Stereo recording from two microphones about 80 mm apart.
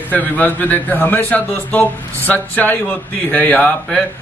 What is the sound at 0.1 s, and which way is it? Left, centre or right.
A man's voice, left.